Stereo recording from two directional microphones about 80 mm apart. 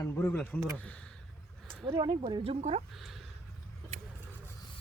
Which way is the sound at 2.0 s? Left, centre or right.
Right.